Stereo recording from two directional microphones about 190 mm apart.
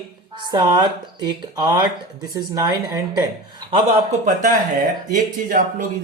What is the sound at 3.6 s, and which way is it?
A man's voice, 30° right (ahead or behind).